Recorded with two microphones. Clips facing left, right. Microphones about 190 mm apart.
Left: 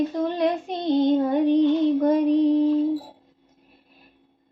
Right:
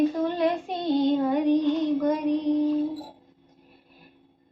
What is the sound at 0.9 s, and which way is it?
Child singing, 20° left (ahead or behind).